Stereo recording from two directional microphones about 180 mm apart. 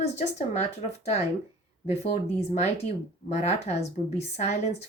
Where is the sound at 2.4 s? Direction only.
35° left (ahead or behind).